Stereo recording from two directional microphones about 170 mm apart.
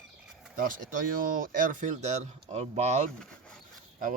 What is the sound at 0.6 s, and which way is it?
Speech, 55° right (ahead or behind).